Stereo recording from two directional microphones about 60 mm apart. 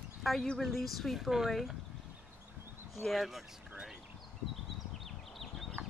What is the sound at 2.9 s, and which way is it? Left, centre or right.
Speech, centre.